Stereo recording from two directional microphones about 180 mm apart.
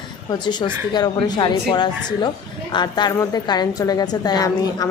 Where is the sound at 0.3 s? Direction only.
25° left (ahead or behind).